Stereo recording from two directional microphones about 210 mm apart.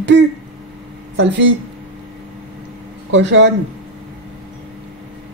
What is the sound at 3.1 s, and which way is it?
Speech, 60° right (ahead or behind).